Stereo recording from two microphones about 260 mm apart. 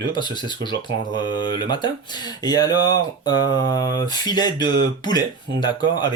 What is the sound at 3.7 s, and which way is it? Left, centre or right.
Speech, centre.